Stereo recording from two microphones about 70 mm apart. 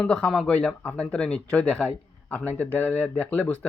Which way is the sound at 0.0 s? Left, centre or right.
Centre.